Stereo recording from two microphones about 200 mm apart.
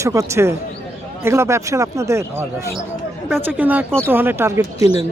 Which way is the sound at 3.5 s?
10° right (ahead or behind).